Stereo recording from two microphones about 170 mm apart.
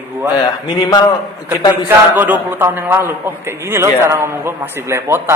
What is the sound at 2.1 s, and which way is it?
A man's voice, 10° right (ahead or behind).